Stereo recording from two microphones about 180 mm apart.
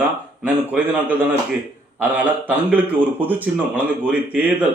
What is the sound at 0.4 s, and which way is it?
A man's voice, 10° right (ahead or behind).